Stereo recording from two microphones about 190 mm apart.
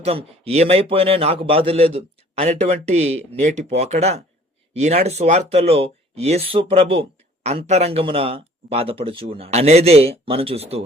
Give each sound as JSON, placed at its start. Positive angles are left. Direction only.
{"t": 0.0, "sound": "speech", "side_deg": -30}